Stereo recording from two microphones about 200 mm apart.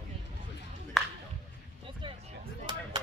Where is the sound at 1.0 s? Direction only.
Centre (ahead or behind).